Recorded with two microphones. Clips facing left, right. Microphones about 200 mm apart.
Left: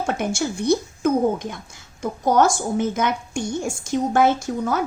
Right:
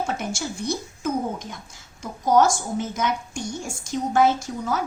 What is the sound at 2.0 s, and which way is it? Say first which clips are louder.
A woman's voice: left 1 dB; 55° left (ahead or behind).